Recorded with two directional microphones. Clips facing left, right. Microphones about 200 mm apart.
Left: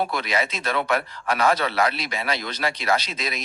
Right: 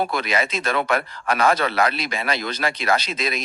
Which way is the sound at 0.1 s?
50° right (ahead or behind).